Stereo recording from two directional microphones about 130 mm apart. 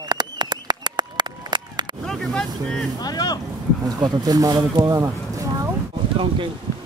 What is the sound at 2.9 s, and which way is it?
Vehicle, 30° left (ahead or behind).